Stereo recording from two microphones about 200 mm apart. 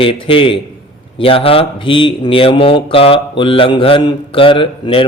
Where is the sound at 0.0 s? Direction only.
25° left (ahead or behind).